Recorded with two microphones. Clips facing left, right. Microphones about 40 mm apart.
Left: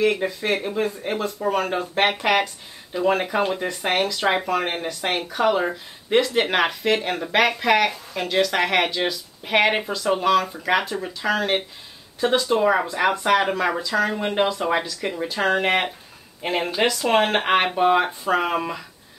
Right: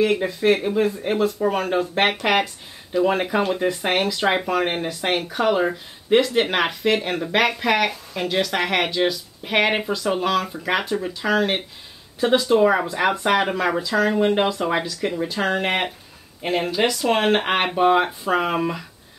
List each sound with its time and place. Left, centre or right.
0.0 s speech: centre